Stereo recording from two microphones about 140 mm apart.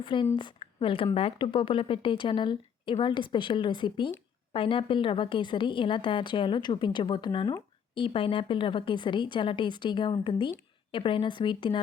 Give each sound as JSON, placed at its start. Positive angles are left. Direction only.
{"t": 0.0, "sound": "a woman's voice", "side_deg": 35}